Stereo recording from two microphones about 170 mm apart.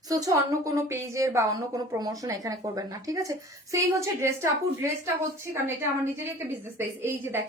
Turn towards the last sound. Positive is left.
turn(degrees=-15)  # may be behind; listen again after turning